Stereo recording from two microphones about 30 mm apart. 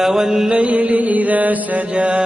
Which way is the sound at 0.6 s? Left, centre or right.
Right.